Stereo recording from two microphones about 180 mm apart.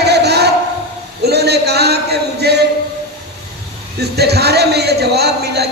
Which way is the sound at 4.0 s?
65° right (ahead or behind).